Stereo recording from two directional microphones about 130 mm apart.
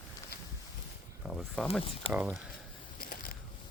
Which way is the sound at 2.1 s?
10° right (ahead or behind).